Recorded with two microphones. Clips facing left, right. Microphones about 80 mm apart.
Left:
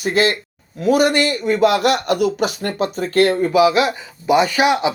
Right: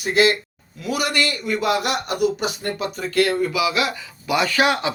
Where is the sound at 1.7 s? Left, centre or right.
Left.